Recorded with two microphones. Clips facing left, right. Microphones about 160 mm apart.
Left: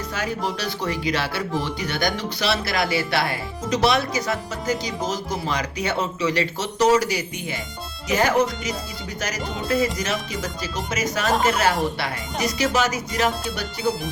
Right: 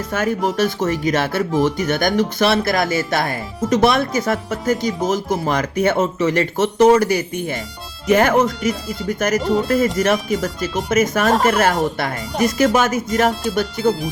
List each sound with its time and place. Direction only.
0.1 s speech: 50° right (ahead or behind)